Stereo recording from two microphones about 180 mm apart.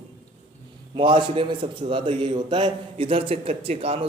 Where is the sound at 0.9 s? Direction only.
30° right (ahead or behind).